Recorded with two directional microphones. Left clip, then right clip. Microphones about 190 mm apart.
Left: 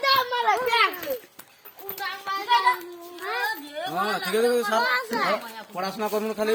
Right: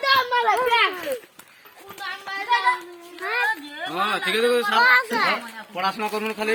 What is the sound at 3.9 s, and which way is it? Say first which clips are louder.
Speech: right 3 dB; 45° left (ahead or behind).